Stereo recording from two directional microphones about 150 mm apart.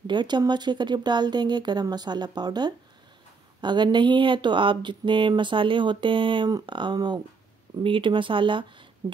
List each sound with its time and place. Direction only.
0.0 s speech: 30° right (ahead or behind)